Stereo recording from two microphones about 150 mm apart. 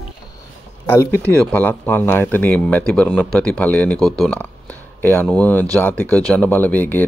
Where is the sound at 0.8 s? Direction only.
15° left (ahead or behind).